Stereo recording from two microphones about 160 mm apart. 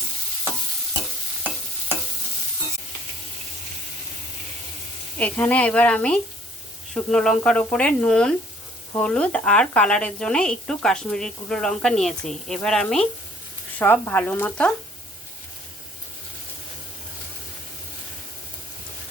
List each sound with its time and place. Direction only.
5.1 s a woman's voice: 10° left (ahead or behind)